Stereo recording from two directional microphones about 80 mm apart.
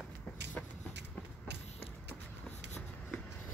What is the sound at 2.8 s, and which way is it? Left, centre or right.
Shuffle, centre.